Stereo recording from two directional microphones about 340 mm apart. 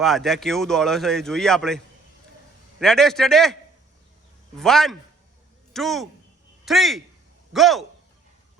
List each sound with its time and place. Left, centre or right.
0.0 s a man's voice: centre